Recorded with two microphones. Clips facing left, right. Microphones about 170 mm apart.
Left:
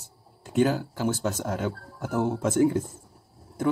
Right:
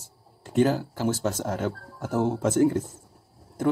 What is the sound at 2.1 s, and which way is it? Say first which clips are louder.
Speech: right 1 dB; 25° right (ahead or behind).